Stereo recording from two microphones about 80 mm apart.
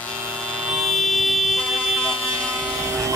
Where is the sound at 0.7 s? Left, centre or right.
Centre.